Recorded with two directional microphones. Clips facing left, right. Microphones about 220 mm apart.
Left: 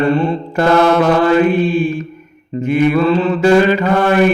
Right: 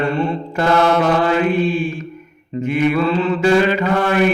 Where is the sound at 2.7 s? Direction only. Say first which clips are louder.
Left 4 dB; 40° left (ahead or behind).